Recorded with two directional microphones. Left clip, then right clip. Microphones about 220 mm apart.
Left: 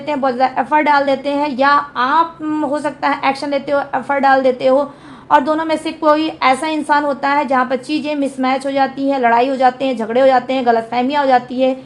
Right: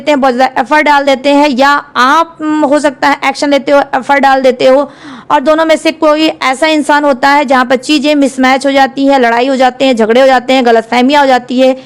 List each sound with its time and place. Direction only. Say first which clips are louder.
0.0 s a woman's voice: right 8 dB; 50° right (ahead or behind)